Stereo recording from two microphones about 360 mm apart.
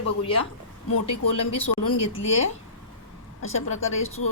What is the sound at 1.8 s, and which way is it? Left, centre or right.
Speech, left.